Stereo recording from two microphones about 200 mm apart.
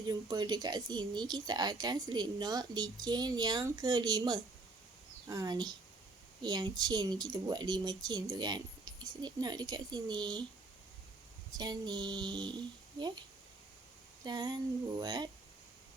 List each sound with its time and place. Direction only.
0.1 s speech: 20° right (ahead or behind)
11.5 s speech: 20° right (ahead or behind)
14.3 s speech: 20° right (ahead or behind)